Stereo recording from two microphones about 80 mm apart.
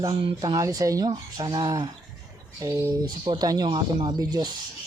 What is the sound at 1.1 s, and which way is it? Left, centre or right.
Speech, right.